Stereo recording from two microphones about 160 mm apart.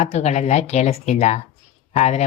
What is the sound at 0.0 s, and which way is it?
Speech, 45° left (ahead or behind).